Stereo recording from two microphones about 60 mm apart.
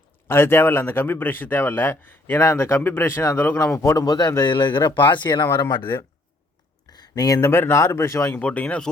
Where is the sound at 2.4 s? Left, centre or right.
Left.